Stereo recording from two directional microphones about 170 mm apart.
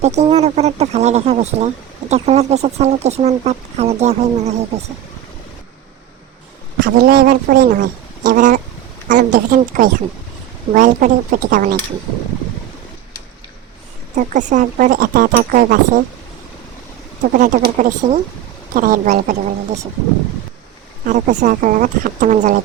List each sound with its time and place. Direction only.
0.0 s speech: 40° right (ahead or behind)
6.8 s speech: 60° right (ahead or behind)
14.2 s speech: 45° right (ahead or behind)
17.3 s speech: 50° right (ahead or behind)
21.0 s speech: 50° right (ahead or behind)